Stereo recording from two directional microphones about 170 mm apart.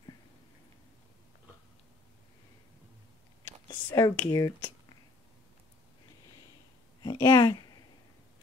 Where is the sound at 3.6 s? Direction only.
20° left (ahead or behind).